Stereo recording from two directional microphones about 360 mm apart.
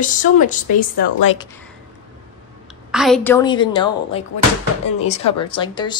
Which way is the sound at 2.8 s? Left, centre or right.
Centre.